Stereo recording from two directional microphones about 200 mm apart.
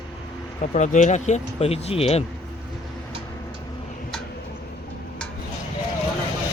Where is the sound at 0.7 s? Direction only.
35° left (ahead or behind).